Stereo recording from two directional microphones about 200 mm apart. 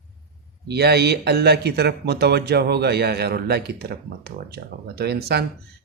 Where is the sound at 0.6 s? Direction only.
55° right (ahead or behind).